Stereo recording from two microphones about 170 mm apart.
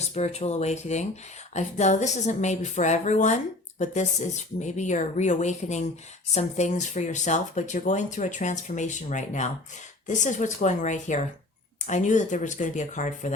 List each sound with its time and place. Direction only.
0.0 s a woman's voice: 40° left (ahead or behind)